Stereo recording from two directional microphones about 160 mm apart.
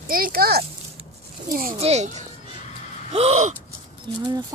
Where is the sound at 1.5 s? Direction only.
65° right (ahead or behind).